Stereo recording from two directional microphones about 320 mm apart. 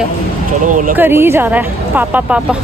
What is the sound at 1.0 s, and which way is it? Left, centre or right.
Speech, centre.